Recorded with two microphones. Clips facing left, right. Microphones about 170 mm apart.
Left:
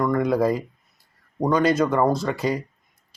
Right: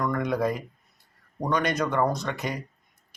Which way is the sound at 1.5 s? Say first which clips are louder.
Left 6 dB; 25° left (ahead or behind).